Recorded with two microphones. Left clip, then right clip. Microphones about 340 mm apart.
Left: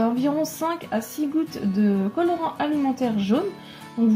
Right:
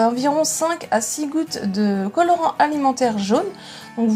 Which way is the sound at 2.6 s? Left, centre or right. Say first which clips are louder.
Right 6 dB; right.